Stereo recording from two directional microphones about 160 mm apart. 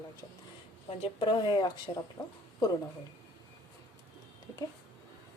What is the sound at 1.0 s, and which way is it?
Speech, 30° left (ahead or behind).